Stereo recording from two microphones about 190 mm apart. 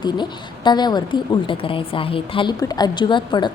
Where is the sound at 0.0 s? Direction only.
25° left (ahead or behind).